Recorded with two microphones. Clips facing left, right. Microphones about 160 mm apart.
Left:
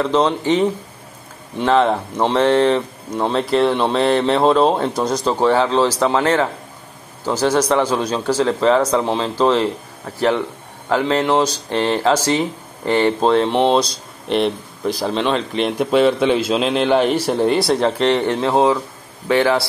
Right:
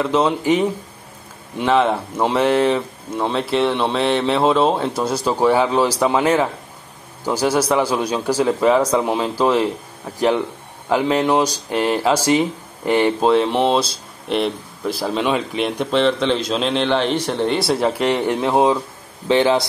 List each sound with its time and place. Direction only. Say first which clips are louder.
0.0 s a man's voice: left 1 dB; 5° right (ahead or behind)